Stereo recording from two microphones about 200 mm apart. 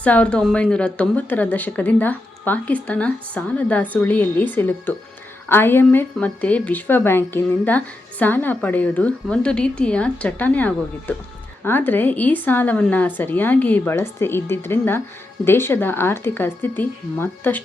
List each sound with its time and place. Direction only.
0.0 s a woman's voice: 5° left (ahead or behind)